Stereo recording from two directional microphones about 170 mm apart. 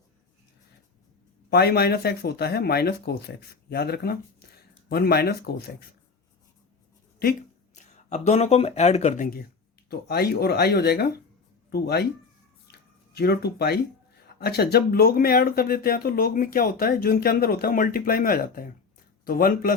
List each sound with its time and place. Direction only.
1.5 s speech: 70° left (ahead or behind)
7.9 s speech: 40° left (ahead or behind)
9.9 s speech: 65° left (ahead or behind)
13.1 s speech: 70° left (ahead or behind)